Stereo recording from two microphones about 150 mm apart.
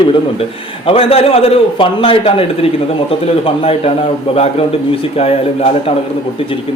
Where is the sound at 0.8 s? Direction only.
40° left (ahead or behind).